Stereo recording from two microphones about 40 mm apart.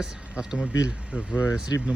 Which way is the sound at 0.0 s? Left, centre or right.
Right.